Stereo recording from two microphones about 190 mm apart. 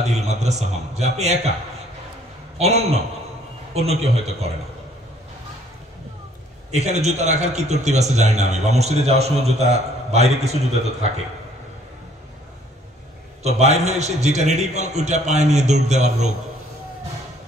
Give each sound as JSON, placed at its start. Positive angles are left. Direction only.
{"t": 0.0, "sound": "a man's voice", "side_deg": -35}
{"t": 2.5, "sound": "a man's voice", "side_deg": -35}
{"t": 6.7, "sound": "a man's voice", "side_deg": -35}
{"t": 13.4, "sound": "a man's voice", "side_deg": -35}